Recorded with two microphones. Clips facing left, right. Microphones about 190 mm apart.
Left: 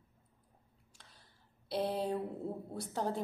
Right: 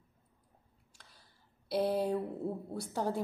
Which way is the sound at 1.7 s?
5° right (ahead or behind).